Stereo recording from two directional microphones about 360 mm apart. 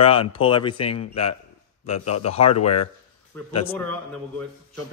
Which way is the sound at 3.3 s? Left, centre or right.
Centre.